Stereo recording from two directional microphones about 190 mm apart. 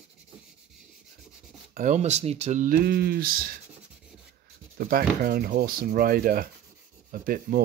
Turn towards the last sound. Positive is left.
turn(degrees=-50)  # may be behind; listen again after turning